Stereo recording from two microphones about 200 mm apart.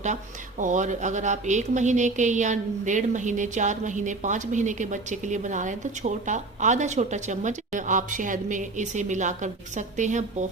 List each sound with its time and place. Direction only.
0.6 s speech: 40° right (ahead or behind)